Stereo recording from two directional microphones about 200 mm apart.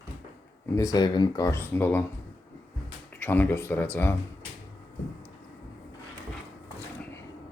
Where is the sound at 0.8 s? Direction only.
20° left (ahead or behind).